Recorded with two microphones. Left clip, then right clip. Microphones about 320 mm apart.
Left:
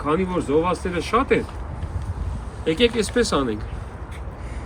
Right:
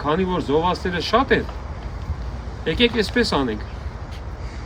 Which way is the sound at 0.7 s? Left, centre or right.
Centre.